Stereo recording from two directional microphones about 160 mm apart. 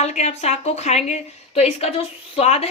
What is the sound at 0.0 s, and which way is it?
A woman's voice, 45° left (ahead or behind).